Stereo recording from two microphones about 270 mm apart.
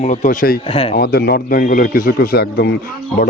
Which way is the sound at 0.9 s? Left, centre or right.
Left.